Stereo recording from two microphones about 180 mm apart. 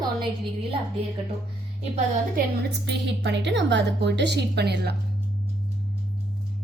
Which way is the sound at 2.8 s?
75° right (ahead or behind).